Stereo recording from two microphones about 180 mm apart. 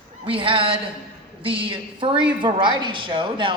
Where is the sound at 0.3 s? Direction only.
30° right (ahead or behind).